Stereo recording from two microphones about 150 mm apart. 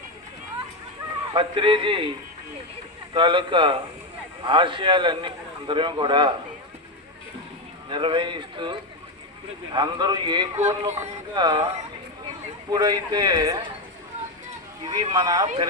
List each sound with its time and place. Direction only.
1.3 s a man's voice: 35° right (ahead or behind)
3.2 s a man's voice: 30° right (ahead or behind)
7.9 s a man's voice: 30° right (ahead or behind)
9.7 s a man's voice: 30° right (ahead or behind)
10.6 s music: 50° right (ahead or behind)
10.9 s a man's voice: 30° right (ahead or behind)
12.7 s a man's voice: 25° right (ahead or behind)
14.8 s a man's voice: 30° right (ahead or behind)